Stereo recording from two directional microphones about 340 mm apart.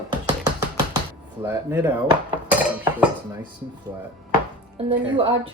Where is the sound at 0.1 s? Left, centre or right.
Centre.